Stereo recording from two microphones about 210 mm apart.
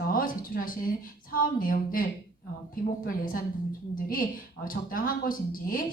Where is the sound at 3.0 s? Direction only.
40° left (ahead or behind).